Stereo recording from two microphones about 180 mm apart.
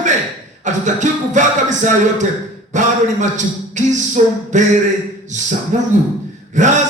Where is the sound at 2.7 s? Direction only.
45° right (ahead or behind).